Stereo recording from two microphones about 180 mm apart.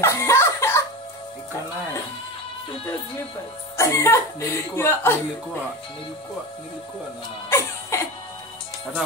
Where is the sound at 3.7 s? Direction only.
15° left (ahead or behind).